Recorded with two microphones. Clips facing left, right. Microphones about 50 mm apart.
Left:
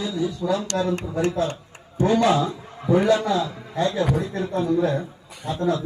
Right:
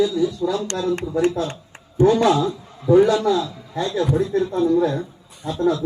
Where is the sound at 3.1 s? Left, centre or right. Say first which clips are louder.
Right 1 dB; left.